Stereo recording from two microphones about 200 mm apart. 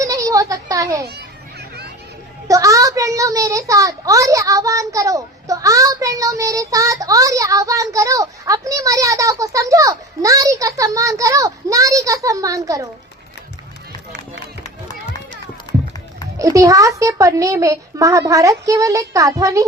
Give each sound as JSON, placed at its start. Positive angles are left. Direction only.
{"t": 0.0, "sound": "a sound", "side_deg": -15}
{"t": 1.0, "sound": "children playing", "side_deg": -55}
{"t": 2.5, "sound": "a child's voice", "side_deg": -15}
{"t": 15.7, "sound": "run", "side_deg": 20}
{"t": 16.4, "sound": "a child's voice", "side_deg": -15}